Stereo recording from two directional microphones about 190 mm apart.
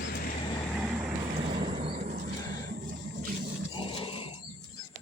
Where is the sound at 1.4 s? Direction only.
30° right (ahead or behind).